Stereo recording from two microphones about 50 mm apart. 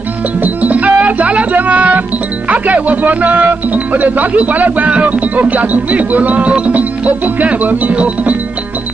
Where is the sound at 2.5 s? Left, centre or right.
Right.